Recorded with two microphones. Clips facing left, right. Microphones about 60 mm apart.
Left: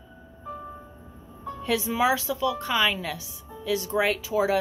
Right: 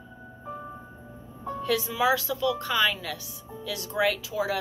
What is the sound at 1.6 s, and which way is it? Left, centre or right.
Speech, left.